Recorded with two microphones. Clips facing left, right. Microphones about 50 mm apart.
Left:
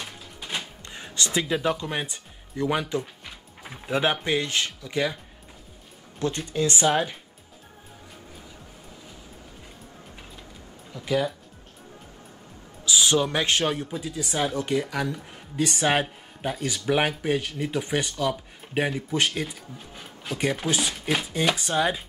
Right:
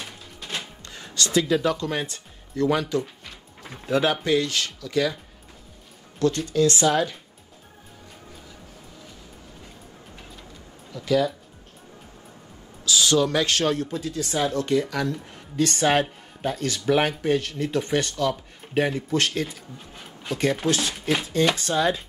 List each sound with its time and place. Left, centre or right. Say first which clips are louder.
0.4 s music: even; centre
0.8 s speech: right 1 dB; left
10.9 s speech: right 3 dB; left
12.8 s speech: right 2 dB; left